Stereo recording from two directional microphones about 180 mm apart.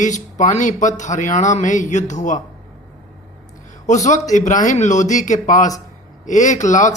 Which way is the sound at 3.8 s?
40° left (ahead or behind).